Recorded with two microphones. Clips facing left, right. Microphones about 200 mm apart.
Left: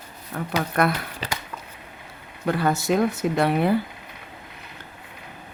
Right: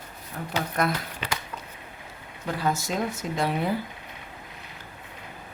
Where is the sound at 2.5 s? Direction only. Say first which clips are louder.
Left 6 dB; 65° left (ahead or behind).